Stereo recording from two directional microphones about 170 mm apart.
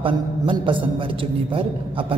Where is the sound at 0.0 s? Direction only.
30° right (ahead or behind).